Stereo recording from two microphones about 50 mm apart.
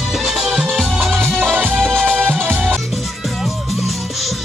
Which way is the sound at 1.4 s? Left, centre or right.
Right.